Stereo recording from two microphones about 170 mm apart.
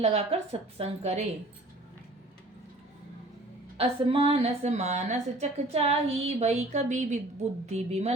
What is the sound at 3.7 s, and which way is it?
A woman's voice, 35° right (ahead or behind).